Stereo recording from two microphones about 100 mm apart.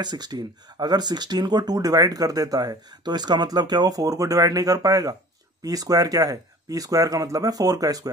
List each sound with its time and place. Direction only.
0.0 s speech: 45° right (ahead or behind)